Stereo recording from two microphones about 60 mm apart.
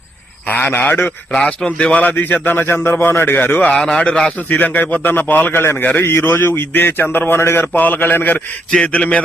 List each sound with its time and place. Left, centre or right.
0.4 s a man's voice: left
1.3 s a man's voice: centre
2.0 s a man's voice: left
3.8 s a man's voice: centre
4.4 s a man's voice: left
7.7 s a man's voice: left